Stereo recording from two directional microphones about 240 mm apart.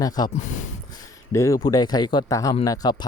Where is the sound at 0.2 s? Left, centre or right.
Centre.